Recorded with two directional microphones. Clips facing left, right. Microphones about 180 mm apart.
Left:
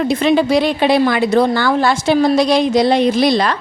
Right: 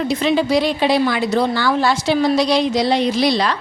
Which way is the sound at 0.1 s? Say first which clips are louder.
Left 3 dB; 55° left (ahead or behind).